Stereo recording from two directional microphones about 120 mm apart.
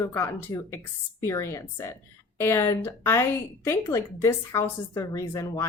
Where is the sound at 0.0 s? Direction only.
25° left (ahead or behind).